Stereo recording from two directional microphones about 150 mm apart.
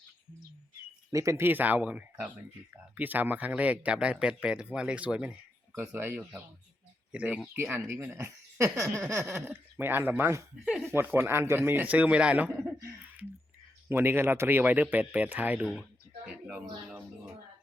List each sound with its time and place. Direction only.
1.1 s speech: 20° right (ahead or behind); by 15.9 s centre (ahead or behind)
16.5 s music: 10° right (ahead or behind)